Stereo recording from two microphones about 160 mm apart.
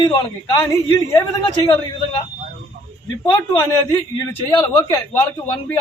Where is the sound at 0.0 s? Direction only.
30° left (ahead or behind).